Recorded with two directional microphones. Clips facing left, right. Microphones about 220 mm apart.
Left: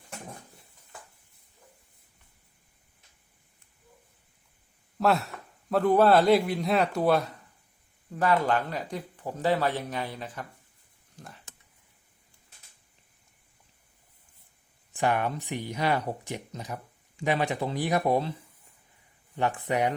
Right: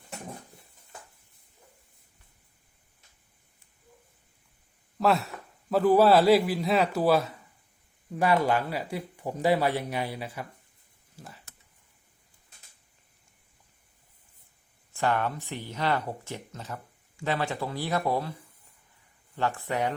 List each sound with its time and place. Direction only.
4.9 s a man's voice: centre (ahead or behind)
11.2 s a sound: centre (ahead or behind)
14.9 s speech: 15° left (ahead or behind)
19.4 s speech: 15° left (ahead or behind)